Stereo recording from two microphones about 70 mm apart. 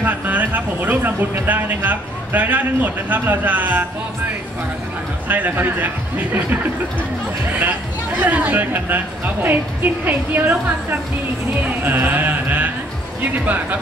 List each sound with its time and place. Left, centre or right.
0.0 s speech: right
5.3 s speech: right
8.2 s speech: right